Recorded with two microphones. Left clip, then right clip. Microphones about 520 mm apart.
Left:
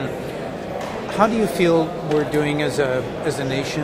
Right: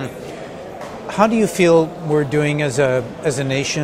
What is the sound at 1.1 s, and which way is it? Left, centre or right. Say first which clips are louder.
A man's voice: right 3 dB; right.